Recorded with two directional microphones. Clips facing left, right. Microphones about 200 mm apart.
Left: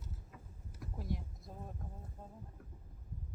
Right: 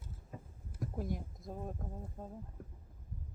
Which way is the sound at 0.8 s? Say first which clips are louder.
Right 4 dB; 50° right (ahead or behind).